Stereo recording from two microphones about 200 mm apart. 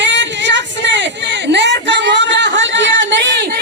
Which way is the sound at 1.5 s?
60° right (ahead or behind).